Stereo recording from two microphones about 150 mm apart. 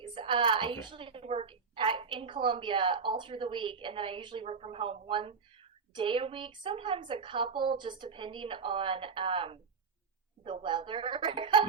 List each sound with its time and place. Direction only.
0.0 s a woman's voice: 35° right (ahead or behind)